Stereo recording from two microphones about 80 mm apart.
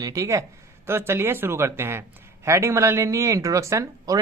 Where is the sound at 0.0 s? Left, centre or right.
Right.